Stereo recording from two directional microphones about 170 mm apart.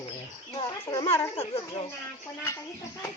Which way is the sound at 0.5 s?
25° left (ahead or behind).